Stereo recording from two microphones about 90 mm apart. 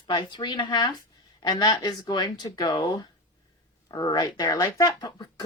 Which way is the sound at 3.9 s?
50° left (ahead or behind).